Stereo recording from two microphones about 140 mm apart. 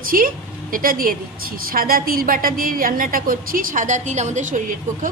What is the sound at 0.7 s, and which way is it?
A woman's voice, 85° right.